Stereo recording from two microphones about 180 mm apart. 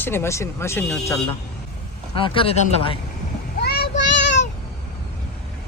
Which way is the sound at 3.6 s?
65° left (ahead or behind).